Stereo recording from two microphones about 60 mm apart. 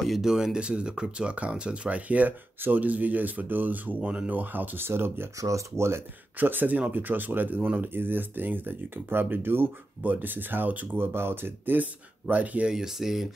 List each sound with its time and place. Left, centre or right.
0.0 s speech: centre; by 5.3 s right
5.4 s speech: right
6.3 s speech: right
7.9 s speech: right
12.6 s speech: centre